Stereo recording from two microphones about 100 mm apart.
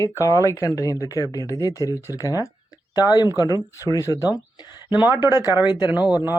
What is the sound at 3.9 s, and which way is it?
Speech, 30° left (ahead or behind).